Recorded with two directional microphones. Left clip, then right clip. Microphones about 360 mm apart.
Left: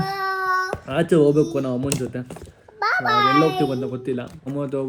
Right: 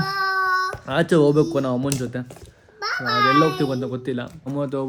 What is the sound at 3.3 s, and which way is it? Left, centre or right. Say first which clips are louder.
A child's voice: even; centre.